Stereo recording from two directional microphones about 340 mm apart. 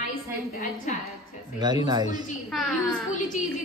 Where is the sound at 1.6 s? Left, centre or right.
Centre.